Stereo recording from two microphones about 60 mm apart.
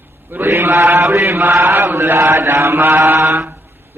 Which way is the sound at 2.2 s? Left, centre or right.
Right.